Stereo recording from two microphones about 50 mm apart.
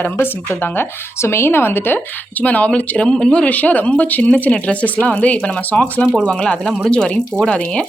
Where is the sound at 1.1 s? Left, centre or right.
Left.